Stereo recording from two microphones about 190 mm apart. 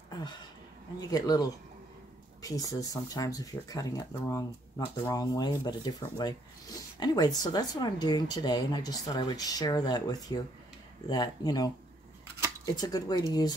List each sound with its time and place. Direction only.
0.9 s speech: 20° left (ahead or behind)
12.7 s speech: 20° left (ahead or behind)